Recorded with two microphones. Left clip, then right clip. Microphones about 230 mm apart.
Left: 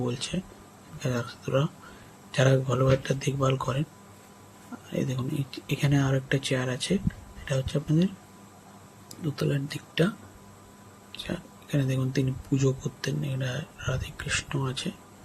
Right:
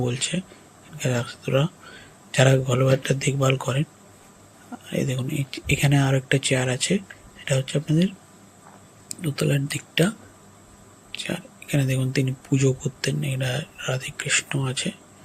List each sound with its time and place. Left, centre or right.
0.0 s speech: centre
4.9 s speech: centre
11.1 s speech: centre